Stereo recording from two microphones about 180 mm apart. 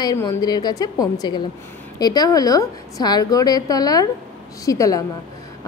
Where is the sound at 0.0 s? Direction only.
20° left (ahead or behind).